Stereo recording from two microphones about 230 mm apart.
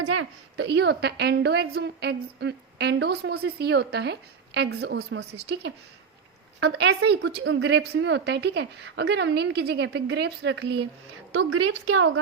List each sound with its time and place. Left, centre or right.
0.0 s a woman's voice: right
11.3 s a woman's voice: right